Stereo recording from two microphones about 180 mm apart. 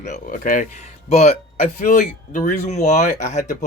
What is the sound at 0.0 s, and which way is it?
Speech, 45° left (ahead or behind).